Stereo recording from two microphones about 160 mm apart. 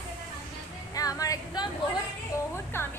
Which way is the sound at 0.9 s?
20° left (ahead or behind).